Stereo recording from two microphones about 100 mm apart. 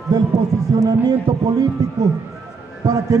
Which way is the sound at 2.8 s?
35° right (ahead or behind).